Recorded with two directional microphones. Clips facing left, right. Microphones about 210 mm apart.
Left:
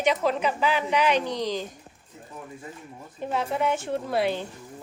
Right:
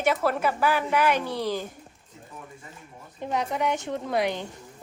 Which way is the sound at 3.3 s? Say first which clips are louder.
Left 1 dB; 15° right (ahead or behind).